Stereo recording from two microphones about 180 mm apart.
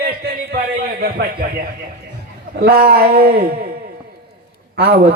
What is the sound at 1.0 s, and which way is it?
A man's voice, 55° right (ahead or behind).